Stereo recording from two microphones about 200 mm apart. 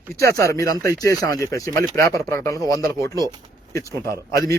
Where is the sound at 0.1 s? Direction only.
15° left (ahead or behind).